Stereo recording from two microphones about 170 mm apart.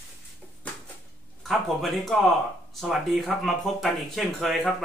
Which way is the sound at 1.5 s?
Centre (ahead or behind).